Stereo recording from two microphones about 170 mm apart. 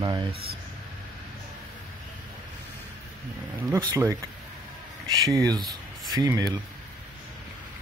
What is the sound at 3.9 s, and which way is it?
Speech, 20° right (ahead or behind).